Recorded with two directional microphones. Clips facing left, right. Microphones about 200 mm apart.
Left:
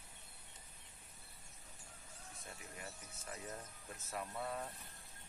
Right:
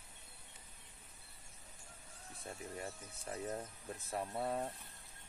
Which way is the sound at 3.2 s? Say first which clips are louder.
Right 7 dB; 30° right (ahead or behind).